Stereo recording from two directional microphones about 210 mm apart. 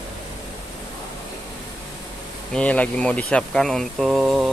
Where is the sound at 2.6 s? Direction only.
5° left (ahead or behind).